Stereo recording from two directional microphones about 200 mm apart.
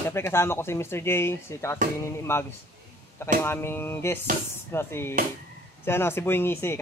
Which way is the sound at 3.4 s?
10° left (ahead or behind).